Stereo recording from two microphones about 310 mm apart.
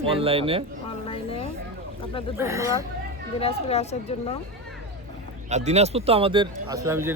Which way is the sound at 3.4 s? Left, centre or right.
Centre.